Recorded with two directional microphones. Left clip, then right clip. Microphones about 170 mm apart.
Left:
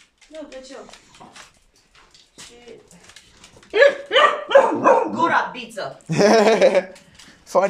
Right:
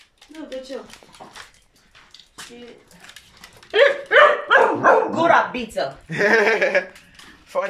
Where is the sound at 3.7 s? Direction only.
20° left (ahead or behind).